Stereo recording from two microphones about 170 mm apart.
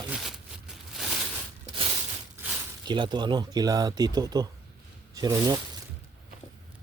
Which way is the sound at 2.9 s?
25° right (ahead or behind).